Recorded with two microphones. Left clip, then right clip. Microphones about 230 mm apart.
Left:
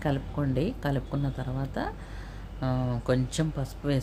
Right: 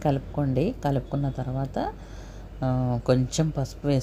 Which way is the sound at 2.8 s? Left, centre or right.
Centre.